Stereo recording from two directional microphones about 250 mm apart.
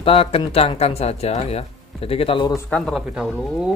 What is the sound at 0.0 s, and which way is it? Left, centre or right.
Speech, left.